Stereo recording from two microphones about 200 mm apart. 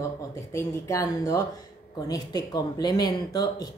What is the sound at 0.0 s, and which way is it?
A woman's voice, 15° left (ahead or behind).